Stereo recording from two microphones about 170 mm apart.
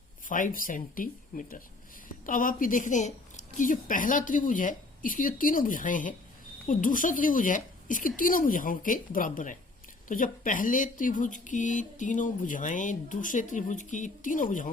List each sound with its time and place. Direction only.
0.3 s speech: 50° left (ahead or behind)